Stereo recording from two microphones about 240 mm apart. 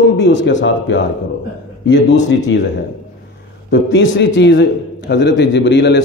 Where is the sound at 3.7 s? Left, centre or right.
Left.